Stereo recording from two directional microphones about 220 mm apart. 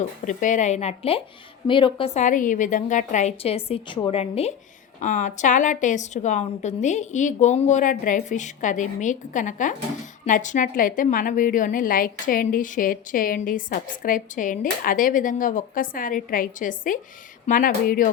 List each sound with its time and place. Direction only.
0.3 s a woman's voice: 35° left (ahead or behind)